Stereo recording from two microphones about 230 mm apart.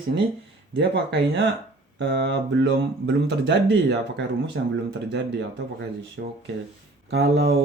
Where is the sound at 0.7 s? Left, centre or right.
Right.